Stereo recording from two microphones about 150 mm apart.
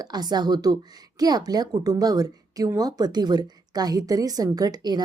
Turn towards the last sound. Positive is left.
turn(degrees=-25)  # may be behind; listen again after turning